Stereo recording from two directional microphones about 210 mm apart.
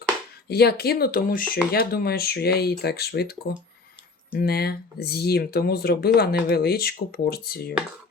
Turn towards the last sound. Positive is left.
turn(degrees=50)  # may be behind; listen again after turning